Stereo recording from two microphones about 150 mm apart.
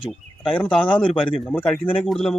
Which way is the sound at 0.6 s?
10° left (ahead or behind).